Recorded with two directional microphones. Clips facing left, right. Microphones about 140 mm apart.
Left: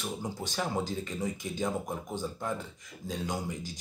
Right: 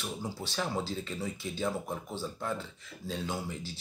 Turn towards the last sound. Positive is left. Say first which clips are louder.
# left 2 dB
turn(degrees=15)  # may be behind; listen again after turning